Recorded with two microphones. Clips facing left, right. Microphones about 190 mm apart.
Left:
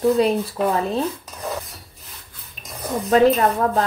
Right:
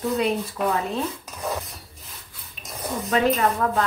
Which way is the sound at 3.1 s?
40° left (ahead or behind).